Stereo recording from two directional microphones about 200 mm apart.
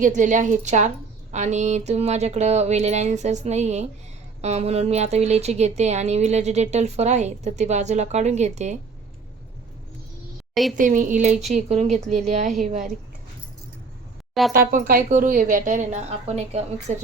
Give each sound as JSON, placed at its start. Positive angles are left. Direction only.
{"t": 0.0, "sound": "a woman's voice", "side_deg": -40}
{"t": 10.5, "sound": "a woman's voice", "side_deg": 0}
{"t": 10.8, "sound": "a woman's voice", "side_deg": -40}
{"t": 14.5, "sound": "a woman's voice", "side_deg": -45}